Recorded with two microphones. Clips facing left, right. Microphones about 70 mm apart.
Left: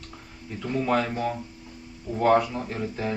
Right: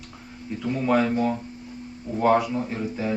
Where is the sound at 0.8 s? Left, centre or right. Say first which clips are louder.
Right 5 dB; centre.